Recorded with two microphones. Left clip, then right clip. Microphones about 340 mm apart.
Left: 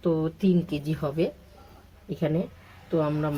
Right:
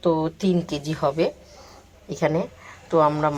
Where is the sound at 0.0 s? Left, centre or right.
Right.